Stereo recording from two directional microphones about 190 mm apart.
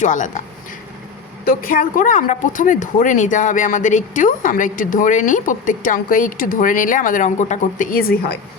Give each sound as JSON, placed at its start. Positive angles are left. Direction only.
{"t": 0.0, "sound": "speech", "side_deg": 40}
{"t": 1.5, "sound": "speech", "side_deg": 45}